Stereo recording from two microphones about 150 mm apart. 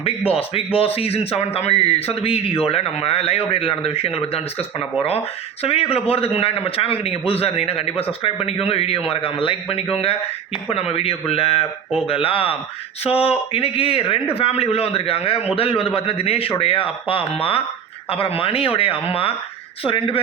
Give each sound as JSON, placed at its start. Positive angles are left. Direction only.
{"t": 0.3, "sound": "speech", "side_deg": 40}